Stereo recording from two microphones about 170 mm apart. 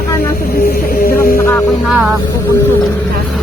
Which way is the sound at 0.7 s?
60° left (ahead or behind).